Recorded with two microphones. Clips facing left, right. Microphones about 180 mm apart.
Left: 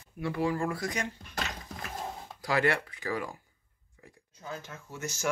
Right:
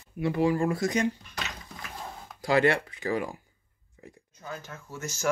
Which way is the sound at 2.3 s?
25° right (ahead or behind).